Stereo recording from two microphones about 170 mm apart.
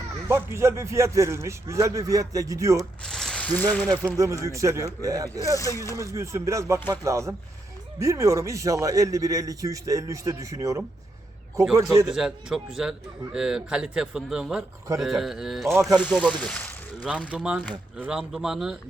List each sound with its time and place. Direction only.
0.3 s speech: 15° right (ahead or behind)
2.7 s a sound: centre (ahead or behind)
3.9 s a man's voice: 15° right (ahead or behind)
5.4 s speech: 20° left (ahead or behind)
6.1 s a man's voice: 15° right (ahead or behind)
12.1 s a man's voice: 5° right (ahead or behind)
15.7 s speech: 15° right (ahead or behind)
16.0 s speech: 5° left (ahead or behind)
17.3 s a man's voice: 5° right (ahead or behind)